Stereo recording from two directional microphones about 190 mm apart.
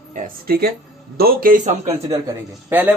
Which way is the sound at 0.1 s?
50° right (ahead or behind).